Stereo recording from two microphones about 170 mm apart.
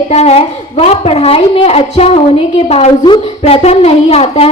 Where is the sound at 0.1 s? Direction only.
40° left (ahead or behind).